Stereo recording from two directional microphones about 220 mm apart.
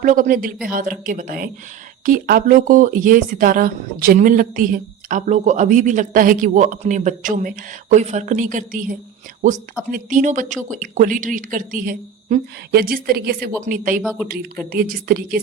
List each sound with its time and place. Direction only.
0.0 s speech: 35° right (ahead or behind)
14.0 s speech: centre (ahead or behind)
14.3 s speech: 40° right (ahead or behind)